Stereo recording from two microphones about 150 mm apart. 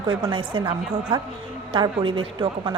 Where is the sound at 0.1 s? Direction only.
30° right (ahead or behind).